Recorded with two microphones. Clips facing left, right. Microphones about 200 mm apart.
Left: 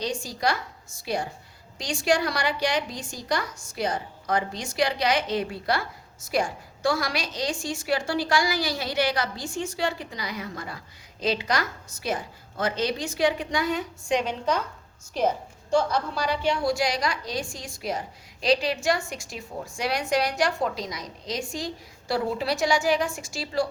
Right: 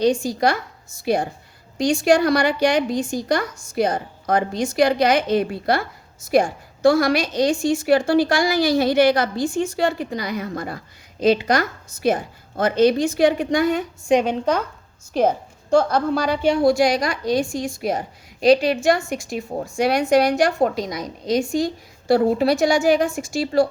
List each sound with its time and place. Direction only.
0.0 s a woman's voice: 55° right (ahead or behind)